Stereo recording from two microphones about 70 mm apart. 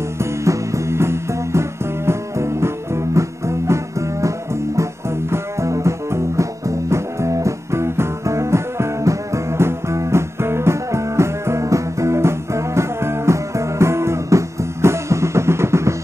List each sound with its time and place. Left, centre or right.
0.2 s music: right
5.3 s music: right